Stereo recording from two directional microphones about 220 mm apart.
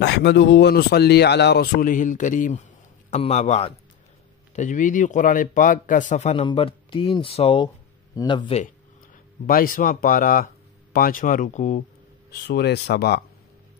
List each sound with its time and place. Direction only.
0.0 s a man's voice: 50° left (ahead or behind); by 8.6 s 25° left (ahead or behind)
9.5 s speech: 40° left (ahead or behind)
12.3 s speech: 45° left (ahead or behind)